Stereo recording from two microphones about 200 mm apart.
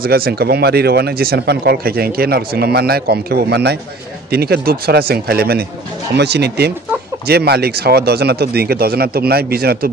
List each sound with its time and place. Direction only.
0.0 s speech: 50° right (ahead or behind)